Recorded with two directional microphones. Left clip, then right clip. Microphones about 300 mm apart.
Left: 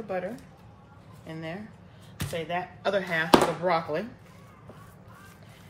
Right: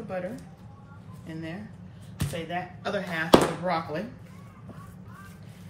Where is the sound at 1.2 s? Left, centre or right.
Left.